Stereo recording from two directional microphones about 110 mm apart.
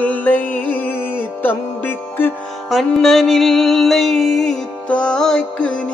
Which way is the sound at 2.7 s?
Centre (ahead or behind).